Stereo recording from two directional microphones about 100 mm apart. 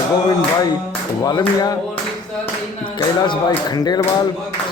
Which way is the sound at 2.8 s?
50° left (ahead or behind).